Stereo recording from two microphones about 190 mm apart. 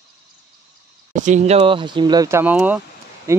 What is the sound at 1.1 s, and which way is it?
Speech, 40° right (ahead or behind).